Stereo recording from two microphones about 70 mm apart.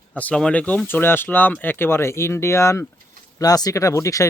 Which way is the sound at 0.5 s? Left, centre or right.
Left.